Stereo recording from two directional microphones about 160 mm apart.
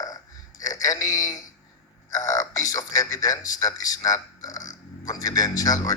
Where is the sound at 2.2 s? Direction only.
20° left (ahead or behind).